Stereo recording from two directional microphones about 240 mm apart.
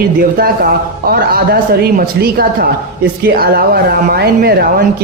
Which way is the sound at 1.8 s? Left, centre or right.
Right.